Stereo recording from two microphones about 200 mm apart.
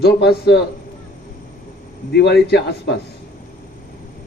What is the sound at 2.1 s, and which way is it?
Speech, 55° left (ahead or behind).